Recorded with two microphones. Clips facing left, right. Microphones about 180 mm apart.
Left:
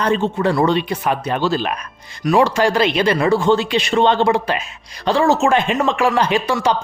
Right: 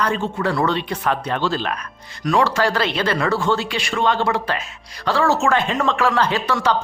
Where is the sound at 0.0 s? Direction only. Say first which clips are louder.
Left 4 dB; 20° left (ahead or behind).